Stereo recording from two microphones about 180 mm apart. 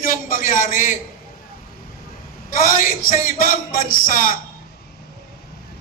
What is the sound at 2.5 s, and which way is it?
A man's voice, 50° left (ahead or behind).